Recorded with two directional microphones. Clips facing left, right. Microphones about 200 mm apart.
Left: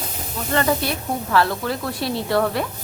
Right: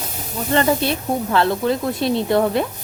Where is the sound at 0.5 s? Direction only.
25° right (ahead or behind).